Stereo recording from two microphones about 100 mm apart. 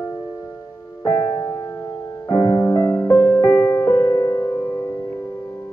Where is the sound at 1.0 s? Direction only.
25° left (ahead or behind).